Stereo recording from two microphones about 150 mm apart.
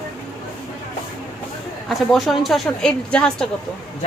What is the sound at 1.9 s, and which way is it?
A woman's voice, centre (ahead or behind).